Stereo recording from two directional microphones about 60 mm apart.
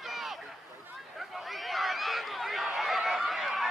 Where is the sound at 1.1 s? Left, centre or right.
Centre.